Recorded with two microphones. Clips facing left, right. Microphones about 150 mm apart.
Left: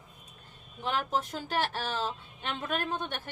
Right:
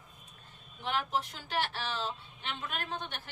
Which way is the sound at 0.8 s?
40° left (ahead or behind).